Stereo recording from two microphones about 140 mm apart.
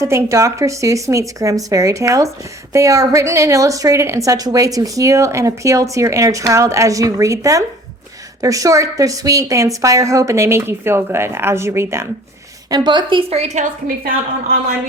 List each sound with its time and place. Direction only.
0.0 s a woman's voice: 20° right (ahead or behind)
12.7 s a woman's voice: 35° right (ahead or behind); by 13.7 s 50° right (ahead or behind)